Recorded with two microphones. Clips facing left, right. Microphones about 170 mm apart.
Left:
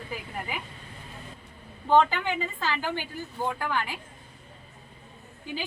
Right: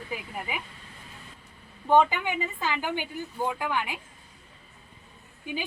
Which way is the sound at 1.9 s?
15° right (ahead or behind).